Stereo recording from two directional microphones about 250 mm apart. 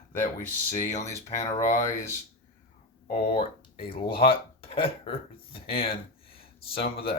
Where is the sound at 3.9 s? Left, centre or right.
Left.